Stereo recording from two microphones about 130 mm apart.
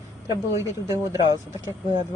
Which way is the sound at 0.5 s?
25° right (ahead or behind).